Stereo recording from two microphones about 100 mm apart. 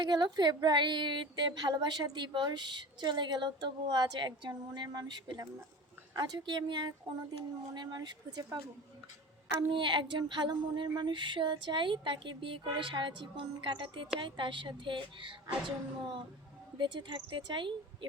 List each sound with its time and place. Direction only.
0.0 s a woman's voice: 45° right (ahead or behind)
9.7 s a woman's voice: 55° right (ahead or behind)